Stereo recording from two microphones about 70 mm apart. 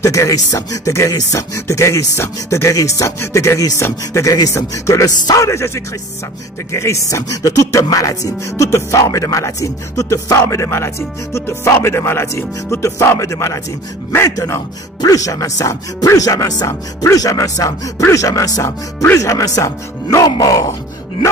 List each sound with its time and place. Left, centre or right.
0.0 s speech: left
6.7 s speech: left
15.0 s speech: left